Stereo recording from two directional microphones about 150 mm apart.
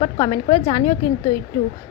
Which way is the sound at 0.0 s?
30° left (ahead or behind).